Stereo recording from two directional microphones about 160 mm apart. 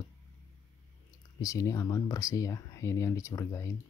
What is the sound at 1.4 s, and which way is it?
Speech, 20° left (ahead or behind).